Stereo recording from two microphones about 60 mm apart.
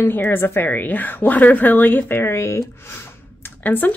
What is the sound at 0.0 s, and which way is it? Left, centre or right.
A woman's voice, left.